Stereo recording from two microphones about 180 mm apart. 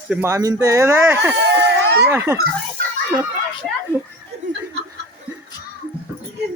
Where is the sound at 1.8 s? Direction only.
70° right (ahead or behind).